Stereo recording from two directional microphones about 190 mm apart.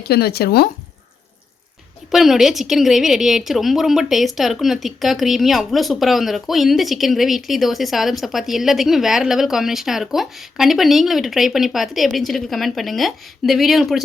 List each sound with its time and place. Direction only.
0.0 s speech: 55° left (ahead or behind)
2.0 s a woman's voice: centre (ahead or behind)